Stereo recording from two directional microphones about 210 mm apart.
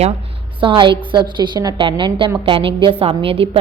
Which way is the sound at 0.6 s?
25° right (ahead or behind).